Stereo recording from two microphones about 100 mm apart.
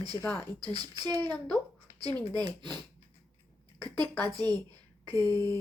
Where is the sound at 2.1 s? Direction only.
20° left (ahead or behind).